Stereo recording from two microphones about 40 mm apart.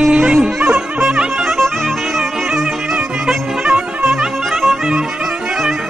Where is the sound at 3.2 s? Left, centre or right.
Right.